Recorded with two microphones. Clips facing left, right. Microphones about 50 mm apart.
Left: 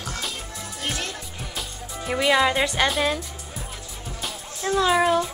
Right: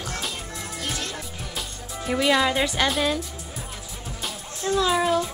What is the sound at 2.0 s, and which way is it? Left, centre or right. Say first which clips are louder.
Speech: left 1 dB; centre.